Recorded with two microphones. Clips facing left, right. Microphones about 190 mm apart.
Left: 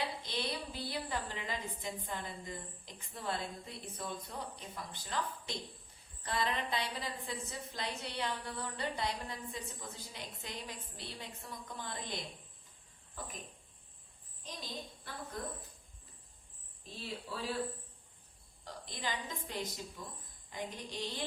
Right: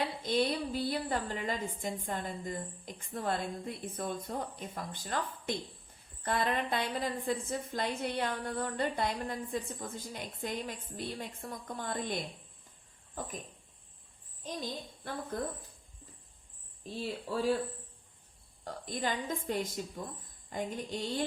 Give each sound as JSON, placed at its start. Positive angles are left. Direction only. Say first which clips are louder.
{"t": 0.2, "sound": "a woman's voice", "louder": "right 9 dB", "side_deg": -50}
{"t": 14.4, "sound": "a child's voice", "louder": "right 6 dB", "side_deg": -50}
{"t": 17.2, "sound": "a woman's voice", "louder": "right 12 dB", "side_deg": -45}
{"t": 18.6, "sound": "a woman's voice", "louder": "right 7 dB", "side_deg": -50}